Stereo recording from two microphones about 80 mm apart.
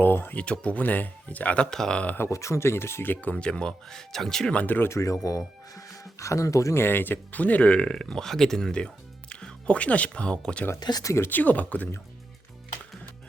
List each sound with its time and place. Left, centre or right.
0.0 s a sound: left
0.4 s speech: centre
1.7 s speech: centre
2.1 s speech: left; by 4.6 s centre
4.6 s speech: left
4.9 s speech: left
6.8 s speech: left
10.8 s speech: left
11.0 s speech: left
11.3 s speech: left